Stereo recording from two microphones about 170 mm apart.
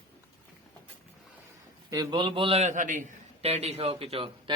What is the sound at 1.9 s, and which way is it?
A man's voice, 25° right (ahead or behind).